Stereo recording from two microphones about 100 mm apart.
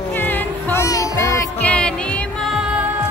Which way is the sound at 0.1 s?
20° left (ahead or behind).